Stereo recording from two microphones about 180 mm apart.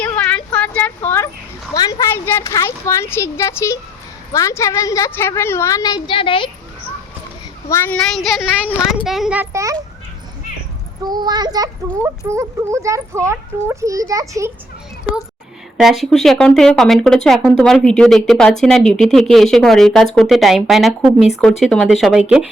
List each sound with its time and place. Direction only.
0.0 s a sound: 10° left (ahead or behind)
1.7 s a woman's voice: 20° left (ahead or behind)
7.7 s a woman's voice: 15° left (ahead or behind)
8.1 s a child's voice: 5° right (ahead or behind)
11.0 s a child's voice: 20° right (ahead or behind)
15.8 s speech: centre (ahead or behind)